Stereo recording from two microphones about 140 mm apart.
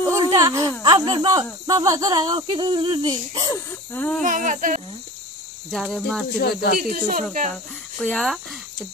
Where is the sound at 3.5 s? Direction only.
10° left (ahead or behind).